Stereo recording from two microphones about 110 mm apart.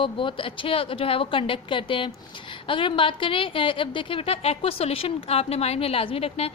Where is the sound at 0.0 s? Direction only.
50° left (ahead or behind).